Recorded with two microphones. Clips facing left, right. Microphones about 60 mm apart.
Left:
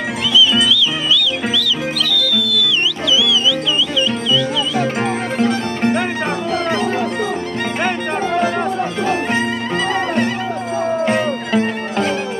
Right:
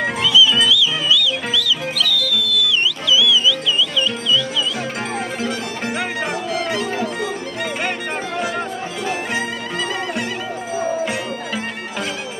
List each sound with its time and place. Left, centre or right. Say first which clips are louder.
0.7 s music: left 1 dB; left
6.5 s music: left 6 dB; left
11.1 s music: left 7 dB; left